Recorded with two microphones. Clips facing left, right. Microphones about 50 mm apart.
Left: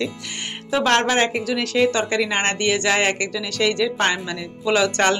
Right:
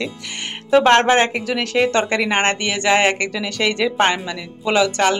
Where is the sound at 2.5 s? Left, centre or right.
Centre.